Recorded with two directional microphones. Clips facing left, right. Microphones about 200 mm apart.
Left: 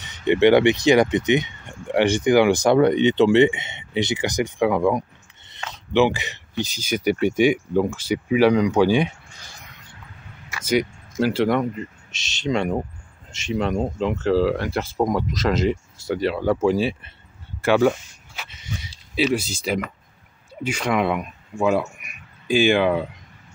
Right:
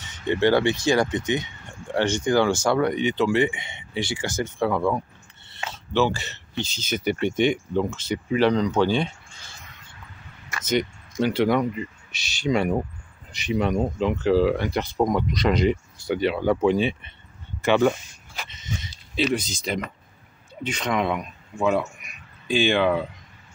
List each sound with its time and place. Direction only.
0.3 s speech: 20° left (ahead or behind); by 11.8 s centre (ahead or behind)
12.1 s speech: 25° left (ahead or behind)
12.4 s speech: centre (ahead or behind)
17.6 s a sound: 5° left (ahead or behind)
20.6 s speech: 10° left (ahead or behind)